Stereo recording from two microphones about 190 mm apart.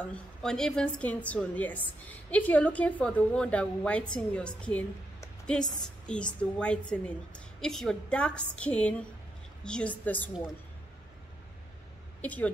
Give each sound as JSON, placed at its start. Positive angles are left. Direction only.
{"t": 0.0, "sound": "a woman's voice", "side_deg": 5}
{"t": 5.6, "sound": "a woman's voice", "side_deg": 20}
{"t": 6.0, "sound": "a woman's voice", "side_deg": 5}
{"t": 12.2, "sound": "speech", "side_deg": 10}